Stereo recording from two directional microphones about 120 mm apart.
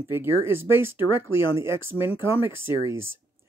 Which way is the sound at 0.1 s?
20° right (ahead or behind).